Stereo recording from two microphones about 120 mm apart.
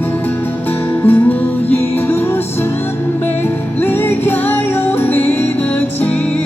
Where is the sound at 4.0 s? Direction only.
15° left (ahead or behind).